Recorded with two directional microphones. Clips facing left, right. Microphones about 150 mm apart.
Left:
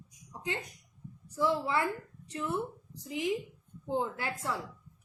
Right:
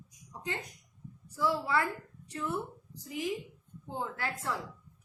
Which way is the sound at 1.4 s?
20° left (ahead or behind).